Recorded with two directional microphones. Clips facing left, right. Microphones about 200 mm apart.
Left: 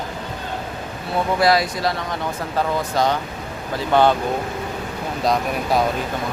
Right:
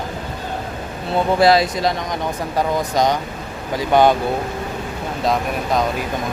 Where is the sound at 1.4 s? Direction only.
25° right (ahead or behind).